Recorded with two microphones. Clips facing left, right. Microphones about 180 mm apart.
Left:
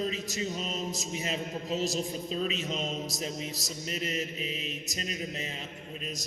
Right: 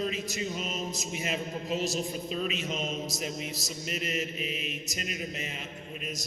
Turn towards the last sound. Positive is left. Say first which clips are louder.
# right 1 dB
turn(degrees=35)  # may be behind; listen again after turning